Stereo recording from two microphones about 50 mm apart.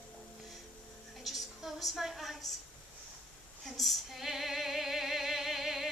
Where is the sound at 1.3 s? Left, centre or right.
Centre.